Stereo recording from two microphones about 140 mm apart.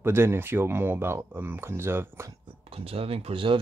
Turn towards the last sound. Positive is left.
turn(degrees=-40)  # may be behind; listen again after turning